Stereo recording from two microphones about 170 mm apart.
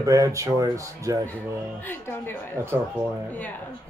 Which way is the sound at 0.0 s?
20° right (ahead or behind).